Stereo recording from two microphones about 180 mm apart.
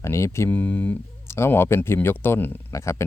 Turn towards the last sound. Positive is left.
turn(degrees=15)  # may be behind; listen again after turning